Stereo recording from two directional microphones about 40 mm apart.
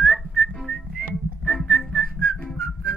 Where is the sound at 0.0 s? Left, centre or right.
Centre.